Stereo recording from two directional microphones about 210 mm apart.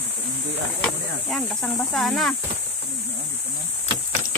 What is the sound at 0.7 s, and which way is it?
Speech, 5° left (ahead or behind).